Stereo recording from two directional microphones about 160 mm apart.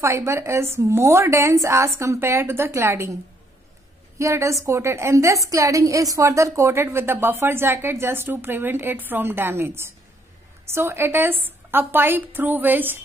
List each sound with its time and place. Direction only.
0.0 s a woman's voice: 15° right (ahead or behind)
4.2 s a woman's voice: 20° right (ahead or behind)